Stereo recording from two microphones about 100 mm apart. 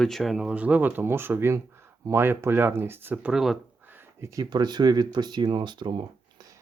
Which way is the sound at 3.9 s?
30° right (ahead or behind).